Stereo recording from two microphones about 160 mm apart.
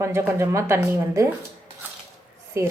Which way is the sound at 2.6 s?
20° right (ahead or behind).